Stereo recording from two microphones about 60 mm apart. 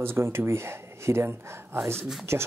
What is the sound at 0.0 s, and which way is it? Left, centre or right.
Speech, right.